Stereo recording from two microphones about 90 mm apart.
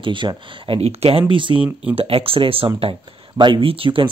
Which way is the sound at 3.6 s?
85° right.